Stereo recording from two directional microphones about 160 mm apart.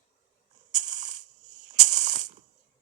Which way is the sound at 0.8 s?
50° right (ahead or behind).